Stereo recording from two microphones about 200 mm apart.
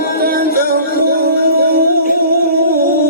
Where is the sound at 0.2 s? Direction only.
45° right (ahead or behind).